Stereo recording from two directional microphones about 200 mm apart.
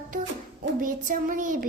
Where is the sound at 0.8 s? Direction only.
40° right (ahead or behind).